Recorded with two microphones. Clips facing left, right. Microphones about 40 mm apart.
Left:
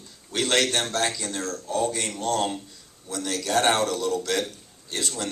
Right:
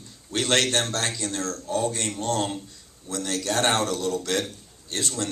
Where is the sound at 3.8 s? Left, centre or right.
Left.